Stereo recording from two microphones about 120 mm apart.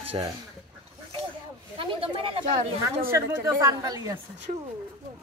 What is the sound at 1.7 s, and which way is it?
Speech, 45° right (ahead or behind).